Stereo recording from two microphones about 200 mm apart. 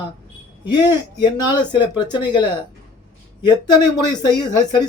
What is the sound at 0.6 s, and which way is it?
Speech, 20° left (ahead or behind).